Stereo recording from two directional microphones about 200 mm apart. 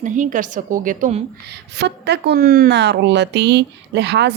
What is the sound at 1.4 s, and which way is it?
A woman's voice, 55° right (ahead or behind).